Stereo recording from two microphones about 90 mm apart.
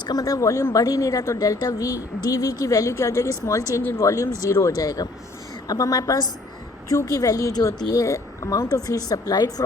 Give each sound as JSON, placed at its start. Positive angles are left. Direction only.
{"t": 0.0, "sound": "speech", "side_deg": 45}